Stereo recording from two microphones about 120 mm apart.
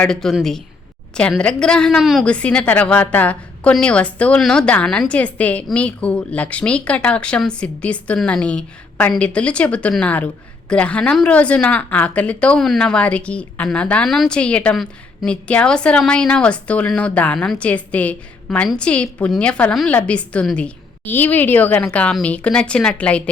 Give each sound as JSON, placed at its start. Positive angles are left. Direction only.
{"t": 0.0, "sound": "a woman's voice", "side_deg": 5}